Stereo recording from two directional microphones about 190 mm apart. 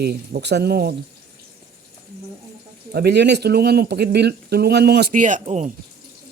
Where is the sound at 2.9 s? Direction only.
60° right (ahead or behind); by 5.7 s 40° right (ahead or behind).